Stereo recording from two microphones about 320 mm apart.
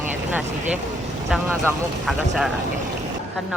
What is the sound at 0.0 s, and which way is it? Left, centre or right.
Vehicle, centre.